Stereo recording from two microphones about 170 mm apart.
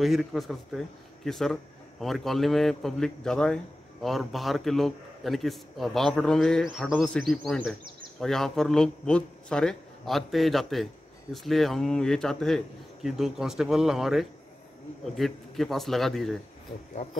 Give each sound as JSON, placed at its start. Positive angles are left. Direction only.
{"t": 0.0, "sound": "speech", "side_deg": 0}
{"t": 16.9, "sound": "speech", "side_deg": 45}